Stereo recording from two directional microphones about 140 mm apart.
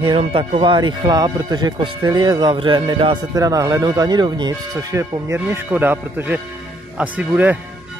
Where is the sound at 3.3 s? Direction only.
25° right (ahead or behind).